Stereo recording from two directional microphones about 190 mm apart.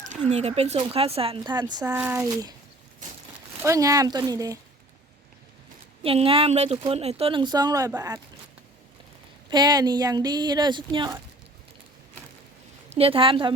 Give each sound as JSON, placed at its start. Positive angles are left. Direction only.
{"t": 0.3, "sound": "speech", "side_deg": -35}
{"t": 1.8, "sound": "speech", "side_deg": -10}
{"t": 3.6, "sound": "speech", "side_deg": -15}
{"t": 6.0, "sound": "speech", "side_deg": -30}
{"t": 9.5, "sound": "speech", "side_deg": -20}
{"t": 12.9, "sound": "speech", "side_deg": -30}